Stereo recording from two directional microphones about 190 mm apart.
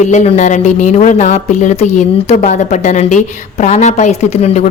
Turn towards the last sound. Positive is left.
turn(degrees=35)  # may be behind; listen again after turning